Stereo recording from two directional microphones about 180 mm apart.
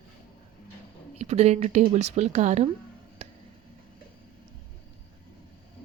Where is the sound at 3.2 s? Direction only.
40° right (ahead or behind).